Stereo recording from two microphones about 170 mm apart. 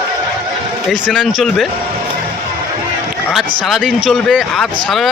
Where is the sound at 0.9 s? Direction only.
Centre (ahead or behind).